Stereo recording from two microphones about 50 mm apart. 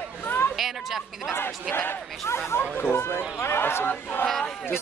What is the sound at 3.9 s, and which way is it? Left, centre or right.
Speech, left.